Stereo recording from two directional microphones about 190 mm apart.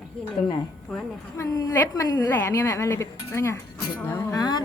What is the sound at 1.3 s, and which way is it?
A woman's voice, 20° left (ahead or behind).